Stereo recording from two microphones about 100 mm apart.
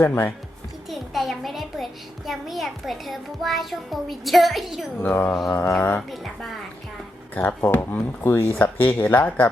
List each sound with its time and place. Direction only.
0.0 s speech: 20° left (ahead or behind)
0.9 s a child's voice: centre (ahead or behind)
4.9 s speech: 20° left (ahead or behind)
5.3 s a child's voice: centre (ahead or behind)
7.3 s speech: 20° left (ahead or behind)